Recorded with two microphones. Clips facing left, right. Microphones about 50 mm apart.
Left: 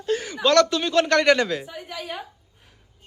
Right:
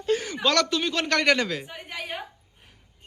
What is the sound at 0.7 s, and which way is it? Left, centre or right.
Speech, centre.